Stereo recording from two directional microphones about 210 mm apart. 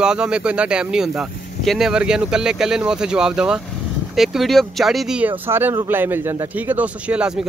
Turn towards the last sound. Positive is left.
turn(degrees=-5)  # may be behind; listen again after turning